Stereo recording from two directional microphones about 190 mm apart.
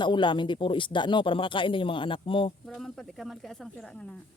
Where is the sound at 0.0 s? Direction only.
25° left (ahead or behind).